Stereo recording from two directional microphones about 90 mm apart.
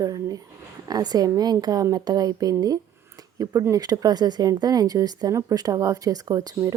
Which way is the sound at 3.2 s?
40° right (ahead or behind).